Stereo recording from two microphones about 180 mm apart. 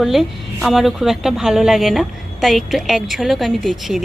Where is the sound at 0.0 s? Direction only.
Centre (ahead or behind).